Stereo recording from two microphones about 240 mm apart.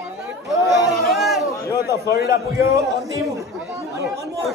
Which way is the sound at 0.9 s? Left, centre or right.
Centre.